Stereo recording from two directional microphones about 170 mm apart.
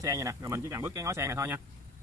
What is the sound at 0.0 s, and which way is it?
Speech, 15° right (ahead or behind).